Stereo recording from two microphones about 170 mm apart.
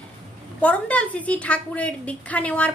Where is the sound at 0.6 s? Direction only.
10° left (ahead or behind).